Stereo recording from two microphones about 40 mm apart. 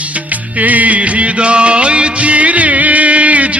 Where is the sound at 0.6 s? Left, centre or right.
Right.